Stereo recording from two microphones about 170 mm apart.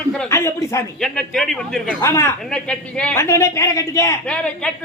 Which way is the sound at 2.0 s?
15° left (ahead or behind).